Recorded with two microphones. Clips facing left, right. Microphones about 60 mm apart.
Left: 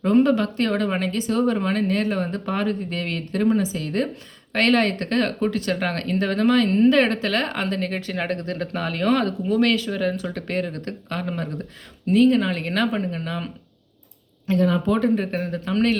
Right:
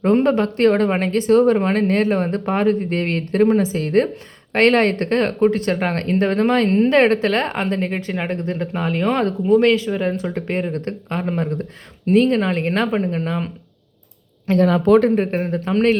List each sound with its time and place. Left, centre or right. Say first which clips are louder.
0.0 s speech: right 2 dB; right
10.7 s speech: right 5 dB; right
12.0 s speech: right 2 dB; right
14.4 s a woman's voice: right 5 dB; right
15.1 s speech: right 4 dB; right